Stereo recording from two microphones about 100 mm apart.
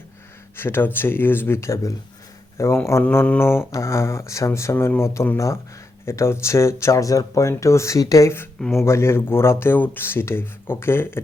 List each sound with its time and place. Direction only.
0.5 s speech: 25° left (ahead or behind)